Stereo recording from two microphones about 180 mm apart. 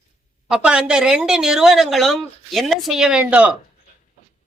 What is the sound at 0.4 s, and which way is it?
A woman's voice, 5° right (ahead or behind).